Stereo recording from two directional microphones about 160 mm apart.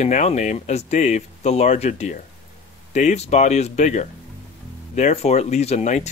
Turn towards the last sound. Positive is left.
turn(degrees=45)  # may be behind; listen again after turning